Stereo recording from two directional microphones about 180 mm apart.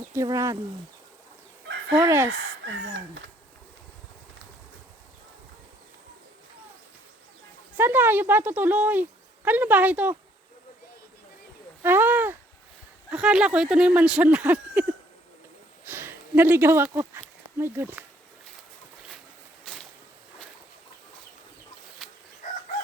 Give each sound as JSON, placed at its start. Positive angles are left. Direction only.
{"t": 0.1, "sound": "speech", "side_deg": -15}
{"t": 2.0, "sound": "speech", "side_deg": -10}
{"t": 7.8, "sound": "speech", "side_deg": -10}
{"t": 11.8, "sound": "a sound", "side_deg": -10}
{"t": 13.1, "sound": "speech", "side_deg": -5}
{"t": 19.6, "sound": "a sound", "side_deg": 5}
{"t": 22.0, "sound": "chicken", "side_deg": 0}